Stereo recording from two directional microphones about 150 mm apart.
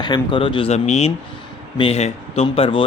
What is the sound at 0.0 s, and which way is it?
A man's voice, 30° left (ahead or behind).